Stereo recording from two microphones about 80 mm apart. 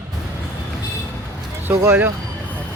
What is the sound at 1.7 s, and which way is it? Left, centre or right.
Speech, right.